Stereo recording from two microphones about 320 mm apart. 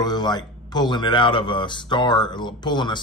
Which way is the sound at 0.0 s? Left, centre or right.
Centre.